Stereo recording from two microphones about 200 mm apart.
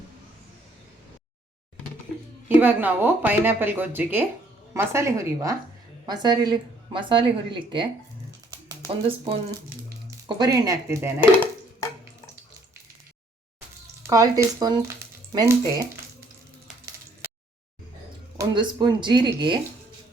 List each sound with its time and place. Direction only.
2.5 s speech: 10° right (ahead or behind)
8.9 s speech: 30° right (ahead or behind); by 11.3 s 15° right (ahead or behind)
14.0 s speech: 15° right (ahead or behind)
18.3 s speech: 20° right (ahead or behind)